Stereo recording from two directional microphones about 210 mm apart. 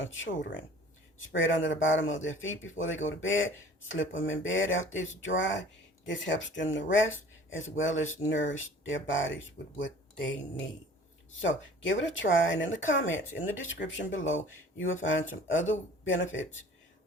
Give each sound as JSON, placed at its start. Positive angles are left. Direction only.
{"t": 0.0, "sound": "speech", "side_deg": 65}
{"t": 11.3, "sound": "speech", "side_deg": 60}